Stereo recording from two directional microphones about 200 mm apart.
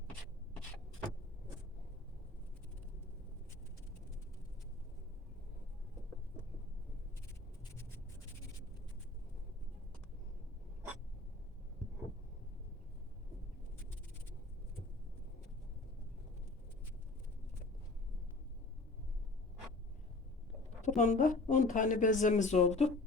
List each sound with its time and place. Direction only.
20.8 s speech: 40° left (ahead or behind)